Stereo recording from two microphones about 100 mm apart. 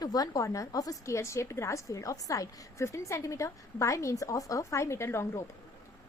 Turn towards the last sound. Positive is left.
turn(degrees=25)  # may be behind; listen again after turning